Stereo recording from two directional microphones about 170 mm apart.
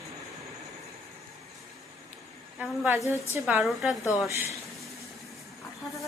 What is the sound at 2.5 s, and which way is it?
A woman's voice, 5° right (ahead or behind).